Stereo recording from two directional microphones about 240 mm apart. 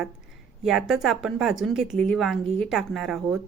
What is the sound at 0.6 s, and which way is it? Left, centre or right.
A woman's voice, centre.